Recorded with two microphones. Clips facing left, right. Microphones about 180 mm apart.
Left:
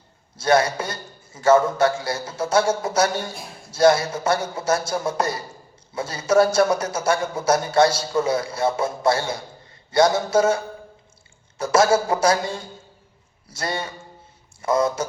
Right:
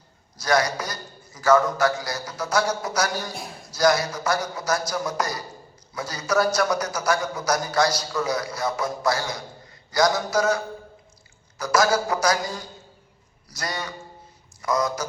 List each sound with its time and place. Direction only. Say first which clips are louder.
0.3 s a man's voice: left 4 dB; 25° left (ahead or behind)